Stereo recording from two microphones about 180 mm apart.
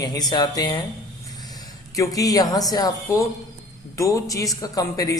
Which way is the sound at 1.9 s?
20° left (ahead or behind).